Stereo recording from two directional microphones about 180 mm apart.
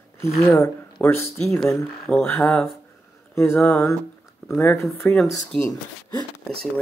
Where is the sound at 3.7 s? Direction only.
15° left (ahead or behind).